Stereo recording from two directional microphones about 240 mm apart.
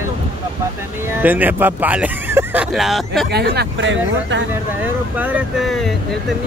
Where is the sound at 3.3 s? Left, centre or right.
Right.